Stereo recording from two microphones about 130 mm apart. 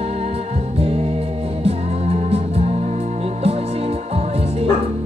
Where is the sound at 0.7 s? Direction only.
50° right (ahead or behind).